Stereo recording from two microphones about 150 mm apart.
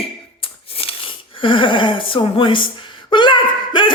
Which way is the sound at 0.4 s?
35° left (ahead or behind).